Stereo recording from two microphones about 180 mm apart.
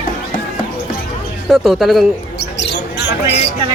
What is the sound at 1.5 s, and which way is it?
Speech, centre (ahead or behind).